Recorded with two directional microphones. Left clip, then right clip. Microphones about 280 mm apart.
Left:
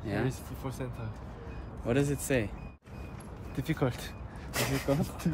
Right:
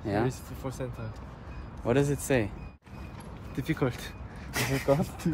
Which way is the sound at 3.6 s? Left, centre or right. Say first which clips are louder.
Right 2 dB; centre.